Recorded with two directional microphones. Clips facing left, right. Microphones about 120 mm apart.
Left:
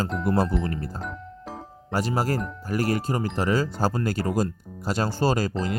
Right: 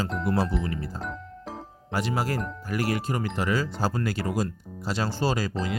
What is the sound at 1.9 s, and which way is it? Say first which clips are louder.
Speech: left 2 dB; 40° left (ahead or behind).